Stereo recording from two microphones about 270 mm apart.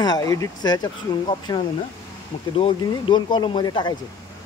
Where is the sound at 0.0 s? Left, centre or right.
Centre.